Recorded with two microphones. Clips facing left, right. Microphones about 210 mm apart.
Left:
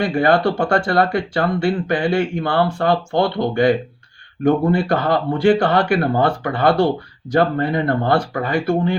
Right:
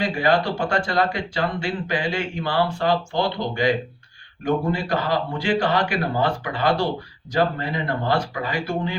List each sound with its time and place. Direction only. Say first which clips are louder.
0.0 s speech: left 5 dB; 55° left (ahead or behind)